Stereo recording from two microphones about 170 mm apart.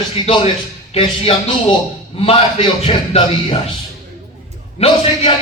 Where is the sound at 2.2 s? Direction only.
35° left (ahead or behind).